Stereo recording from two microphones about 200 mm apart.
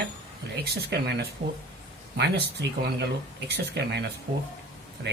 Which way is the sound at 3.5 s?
55° right (ahead or behind).